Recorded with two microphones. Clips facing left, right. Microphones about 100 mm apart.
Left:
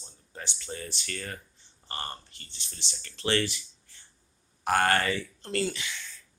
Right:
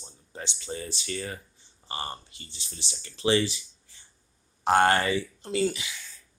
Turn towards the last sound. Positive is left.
turn(degrees=-10)  # may be behind; listen again after turning